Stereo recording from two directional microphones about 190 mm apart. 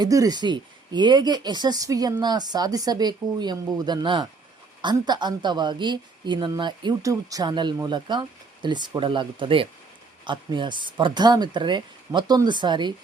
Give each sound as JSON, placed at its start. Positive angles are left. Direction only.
{"t": 0.0, "sound": "speech", "side_deg": -20}